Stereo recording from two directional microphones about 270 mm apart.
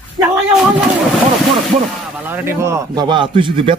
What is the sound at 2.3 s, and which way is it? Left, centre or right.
A man's voice, centre.